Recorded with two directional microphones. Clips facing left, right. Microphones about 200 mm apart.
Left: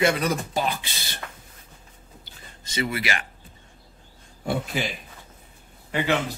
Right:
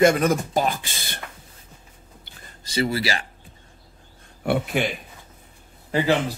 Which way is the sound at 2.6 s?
35° right (ahead or behind).